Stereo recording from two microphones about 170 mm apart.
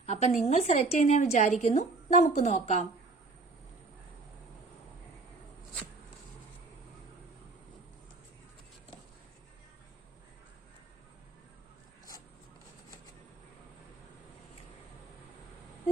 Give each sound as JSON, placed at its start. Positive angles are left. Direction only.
{"t": 0.0, "sound": "a woman's voice", "side_deg": 40}